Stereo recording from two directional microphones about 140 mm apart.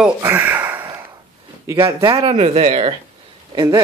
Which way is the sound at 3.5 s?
25° right (ahead or behind).